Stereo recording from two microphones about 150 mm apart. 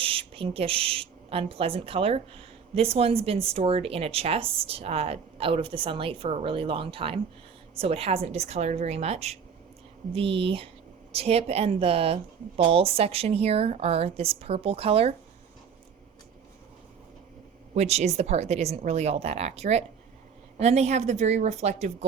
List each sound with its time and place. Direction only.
0.0 s a woman's voice: 40° right (ahead or behind)
17.7 s a woman's voice: 45° right (ahead or behind)